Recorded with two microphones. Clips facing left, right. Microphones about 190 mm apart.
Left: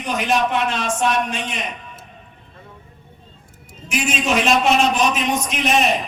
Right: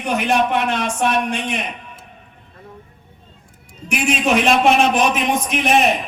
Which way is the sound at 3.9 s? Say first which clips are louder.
Right 3 dB; 55° right (ahead or behind).